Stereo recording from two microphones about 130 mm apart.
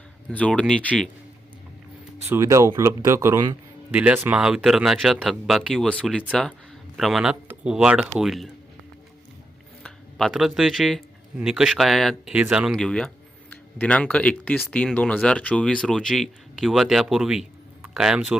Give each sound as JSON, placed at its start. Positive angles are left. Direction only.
{"t": 0.3, "sound": "speech", "side_deg": 10}
{"t": 2.2, "sound": "speech", "side_deg": -20}
{"t": 3.9, "sound": "speech", "side_deg": -10}
{"t": 9.8, "sound": "speech", "side_deg": 0}